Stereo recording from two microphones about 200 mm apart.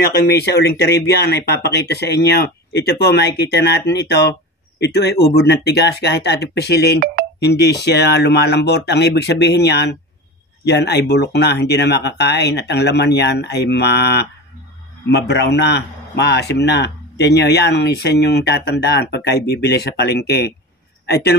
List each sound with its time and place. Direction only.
0.3 s a man's voice: 55° left (ahead or behind)